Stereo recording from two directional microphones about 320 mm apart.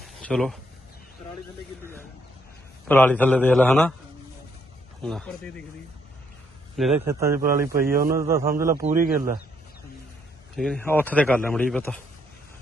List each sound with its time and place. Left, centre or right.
0.0 s a sound: centre
1.8 s speech: centre
5.0 s speech: centre
6.7 s speech: centre
7.4 s speech: right
10.6 s speech: centre